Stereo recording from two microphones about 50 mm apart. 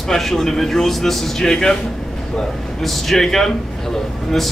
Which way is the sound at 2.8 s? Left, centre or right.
Centre.